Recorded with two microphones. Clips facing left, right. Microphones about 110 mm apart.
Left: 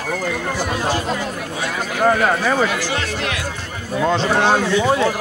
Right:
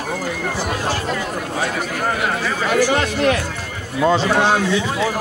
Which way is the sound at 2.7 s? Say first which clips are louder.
Right 6 dB; 45° right (ahead or behind).